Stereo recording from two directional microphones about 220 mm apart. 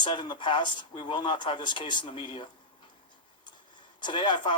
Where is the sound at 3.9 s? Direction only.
20° left (ahead or behind).